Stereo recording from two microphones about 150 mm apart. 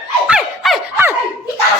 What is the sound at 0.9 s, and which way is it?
Laughter, 15° right (ahead or behind).